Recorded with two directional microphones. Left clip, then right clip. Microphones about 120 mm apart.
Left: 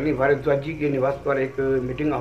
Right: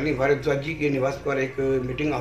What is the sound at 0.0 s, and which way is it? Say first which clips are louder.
A man's voice: left 2 dB; 15° right (ahead or behind).